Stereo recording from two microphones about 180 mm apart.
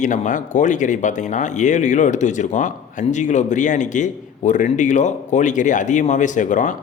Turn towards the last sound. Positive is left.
turn(degrees=45)  # may be behind; listen again after turning